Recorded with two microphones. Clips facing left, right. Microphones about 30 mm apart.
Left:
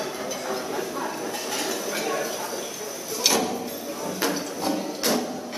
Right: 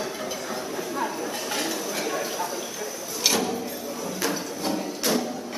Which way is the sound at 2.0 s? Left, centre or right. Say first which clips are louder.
Left 1 dB; centre.